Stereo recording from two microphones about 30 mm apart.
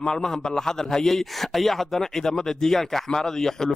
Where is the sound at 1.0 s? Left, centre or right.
Centre.